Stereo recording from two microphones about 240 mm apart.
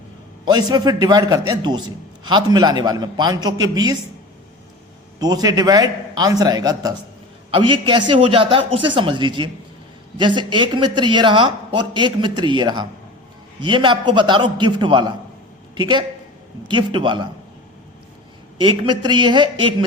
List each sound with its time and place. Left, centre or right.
0.4 s a man's voice: centre
5.2 s a man's voice: centre
18.6 s speech: right